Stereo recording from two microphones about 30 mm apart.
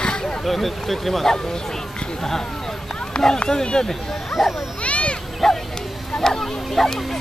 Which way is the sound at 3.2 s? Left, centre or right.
Centre.